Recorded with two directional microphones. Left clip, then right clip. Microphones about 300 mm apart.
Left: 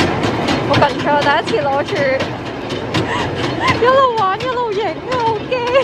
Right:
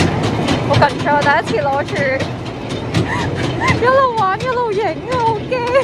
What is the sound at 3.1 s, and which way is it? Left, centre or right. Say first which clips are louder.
Vehicle: left 1 dB; centre.